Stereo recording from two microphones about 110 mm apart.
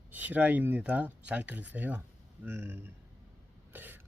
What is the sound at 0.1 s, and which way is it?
Speech, 15° right (ahead or behind).